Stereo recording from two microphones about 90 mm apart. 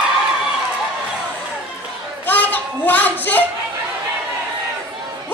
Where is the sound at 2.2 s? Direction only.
20° left (ahead or behind).